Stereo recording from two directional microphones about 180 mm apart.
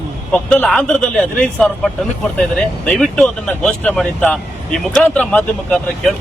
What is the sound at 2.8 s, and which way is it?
Speech, 5° left (ahead or behind).